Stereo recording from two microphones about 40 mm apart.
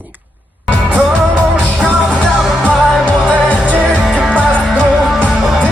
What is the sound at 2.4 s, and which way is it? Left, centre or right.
Music, centre.